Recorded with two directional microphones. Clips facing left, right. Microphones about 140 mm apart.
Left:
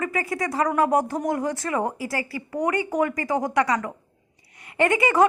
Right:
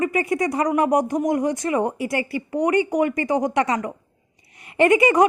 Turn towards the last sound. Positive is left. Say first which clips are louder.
# right 4 dB
turn(degrees=-20)  # may be behind; listen again after turning